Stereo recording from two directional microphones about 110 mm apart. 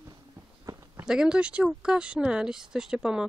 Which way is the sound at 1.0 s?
5° right (ahead or behind).